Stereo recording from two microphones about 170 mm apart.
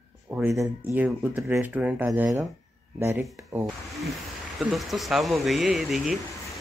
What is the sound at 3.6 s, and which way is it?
Speech, centre (ahead or behind).